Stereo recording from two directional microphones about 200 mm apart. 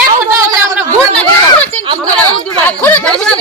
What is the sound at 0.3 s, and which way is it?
Gargling, 15° right (ahead or behind).